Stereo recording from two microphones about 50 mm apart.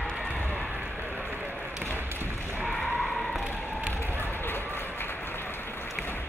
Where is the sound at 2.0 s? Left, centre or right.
Right.